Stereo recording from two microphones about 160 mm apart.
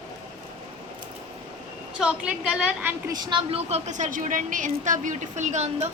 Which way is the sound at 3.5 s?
40° right (ahead or behind).